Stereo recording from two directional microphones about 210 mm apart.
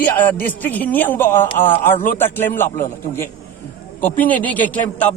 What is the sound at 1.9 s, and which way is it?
Speech, 40° left (ahead or behind).